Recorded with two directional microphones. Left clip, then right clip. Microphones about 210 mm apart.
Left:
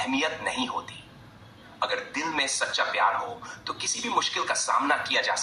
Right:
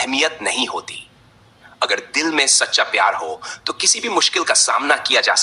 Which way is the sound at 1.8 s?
50° right (ahead or behind).